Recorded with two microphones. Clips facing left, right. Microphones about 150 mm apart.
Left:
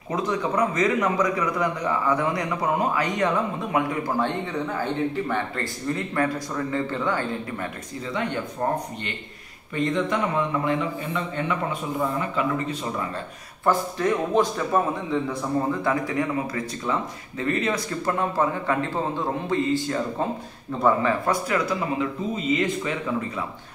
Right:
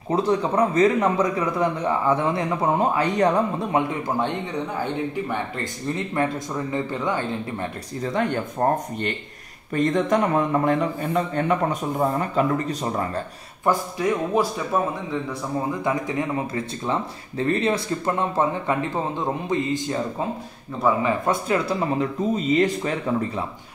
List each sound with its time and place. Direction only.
0.1 s speech: 30° right (ahead or behind)
4.8 s speech: 15° right (ahead or behind)
8.0 s a man's voice: 45° right (ahead or behind)
13.7 s a man's voice: 10° right (ahead or behind)
15.8 s speech: 20° right (ahead or behind)
20.8 s a man's voice: 5° right (ahead or behind)
21.3 s speech: 30° right (ahead or behind)